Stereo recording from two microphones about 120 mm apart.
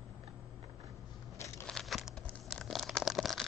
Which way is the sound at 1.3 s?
25° left (ahead or behind).